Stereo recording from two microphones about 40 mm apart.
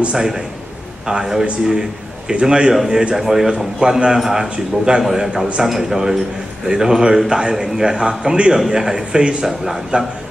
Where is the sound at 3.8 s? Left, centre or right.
Right.